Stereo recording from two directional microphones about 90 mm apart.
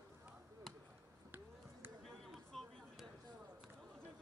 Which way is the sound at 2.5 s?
5° left (ahead or behind).